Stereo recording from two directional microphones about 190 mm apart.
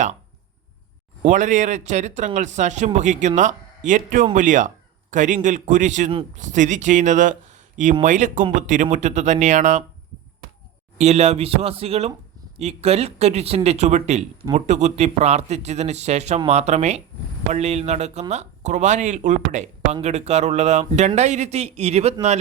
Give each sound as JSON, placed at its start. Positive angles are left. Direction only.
{"t": 1.2, "sound": "a man's voice", "side_deg": -40}
{"t": 10.9, "sound": "speech", "side_deg": -35}